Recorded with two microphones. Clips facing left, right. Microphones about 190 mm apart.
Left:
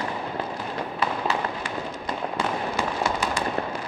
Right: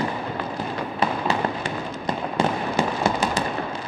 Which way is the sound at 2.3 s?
20° right (ahead or behind).